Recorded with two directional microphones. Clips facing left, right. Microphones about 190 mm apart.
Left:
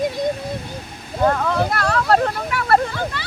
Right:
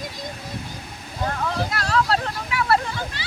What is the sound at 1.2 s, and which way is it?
Speech, 55° left (ahead or behind).